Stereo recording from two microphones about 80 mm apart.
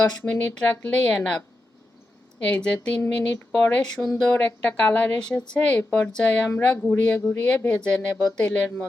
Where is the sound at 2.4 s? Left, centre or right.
Centre.